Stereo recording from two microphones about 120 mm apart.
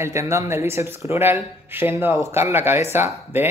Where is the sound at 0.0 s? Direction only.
25° right (ahead or behind).